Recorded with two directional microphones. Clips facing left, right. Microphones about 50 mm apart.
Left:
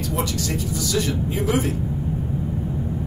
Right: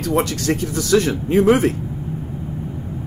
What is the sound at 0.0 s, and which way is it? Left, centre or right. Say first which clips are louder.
Speech: right 6 dB; right.